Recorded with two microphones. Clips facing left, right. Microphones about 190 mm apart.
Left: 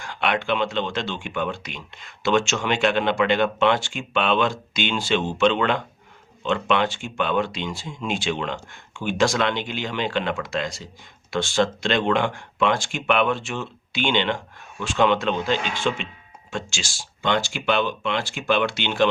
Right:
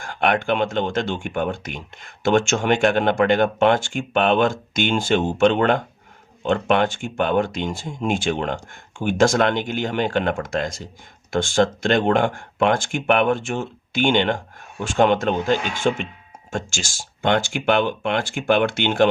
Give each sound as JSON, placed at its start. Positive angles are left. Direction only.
{"t": 0.0, "sound": "speech", "side_deg": -50}